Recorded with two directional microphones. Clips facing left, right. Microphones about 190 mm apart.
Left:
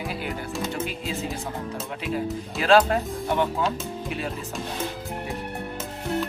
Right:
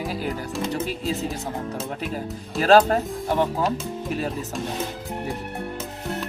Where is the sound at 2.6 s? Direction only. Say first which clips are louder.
Right 3 dB; 40° right (ahead or behind).